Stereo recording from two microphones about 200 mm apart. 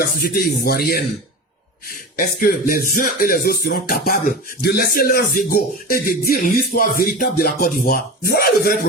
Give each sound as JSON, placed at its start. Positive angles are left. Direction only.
{"t": 0.0, "sound": "speech", "side_deg": 50}
{"t": 2.1, "sound": "speech", "side_deg": 45}